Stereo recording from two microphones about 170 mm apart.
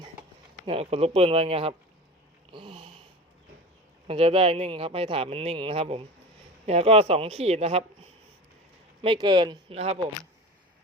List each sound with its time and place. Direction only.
0.6 s speech: 35° right (ahead or behind)
2.5 s a sound: 30° right (ahead or behind)
4.0 s speech: 35° right (ahead or behind)
9.0 s speech: 30° right (ahead or behind)